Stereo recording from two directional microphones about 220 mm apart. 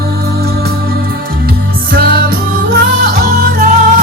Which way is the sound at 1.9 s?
40° right (ahead or behind).